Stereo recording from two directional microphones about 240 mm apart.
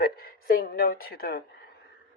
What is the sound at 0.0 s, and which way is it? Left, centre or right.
A woman's voice, left.